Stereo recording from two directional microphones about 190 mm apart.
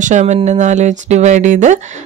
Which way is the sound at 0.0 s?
40° right (ahead or behind).